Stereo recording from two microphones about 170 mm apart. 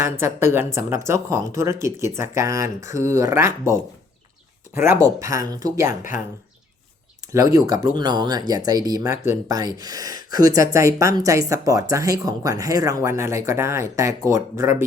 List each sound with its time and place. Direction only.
0.0 s speech: 15° right (ahead or behind)
5.9 s speech: 50° left (ahead or behind)
7.3 s speech: 20° right (ahead or behind)